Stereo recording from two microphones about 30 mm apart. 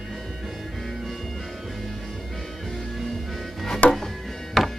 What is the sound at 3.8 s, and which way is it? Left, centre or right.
Chopping, left.